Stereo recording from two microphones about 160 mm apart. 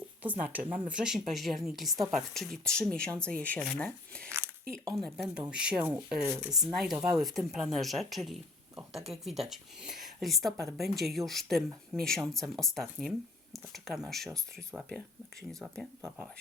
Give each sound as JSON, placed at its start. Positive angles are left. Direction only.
{"t": 0.2, "sound": "a woman's voice", "side_deg": -10}
{"t": 6.5, "sound": "a woman's voice", "side_deg": 0}
{"t": 16.0, "sound": "speech", "side_deg": -15}